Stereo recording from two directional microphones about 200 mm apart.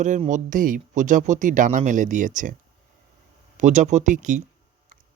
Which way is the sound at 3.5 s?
35° right (ahead or behind).